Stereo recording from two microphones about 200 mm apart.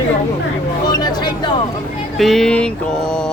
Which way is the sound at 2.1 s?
Centre (ahead or behind).